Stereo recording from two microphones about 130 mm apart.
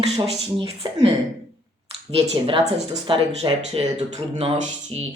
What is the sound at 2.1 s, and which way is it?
Speech, 50° right (ahead or behind).